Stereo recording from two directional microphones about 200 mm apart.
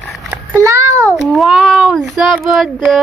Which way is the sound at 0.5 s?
15° right (ahead or behind).